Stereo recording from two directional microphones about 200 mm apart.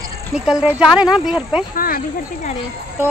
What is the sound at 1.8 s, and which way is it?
Speech, 45° left (ahead or behind).